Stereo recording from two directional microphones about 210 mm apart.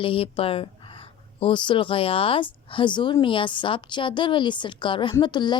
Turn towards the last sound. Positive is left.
turn(degrees=20)  # may be behind; listen again after turning